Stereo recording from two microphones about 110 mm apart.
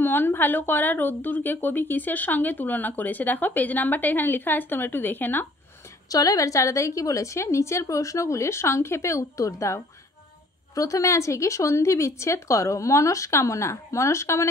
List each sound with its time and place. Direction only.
0.0 s a woman's voice: 20° left (ahead or behind)
6.0 s speech: 35° left (ahead or behind)